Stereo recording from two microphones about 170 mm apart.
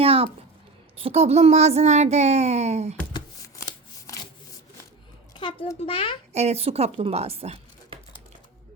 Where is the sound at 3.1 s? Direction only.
20° left (ahead or behind).